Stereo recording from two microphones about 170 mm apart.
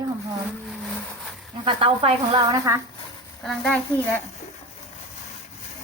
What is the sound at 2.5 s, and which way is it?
Speech, 20° right (ahead or behind).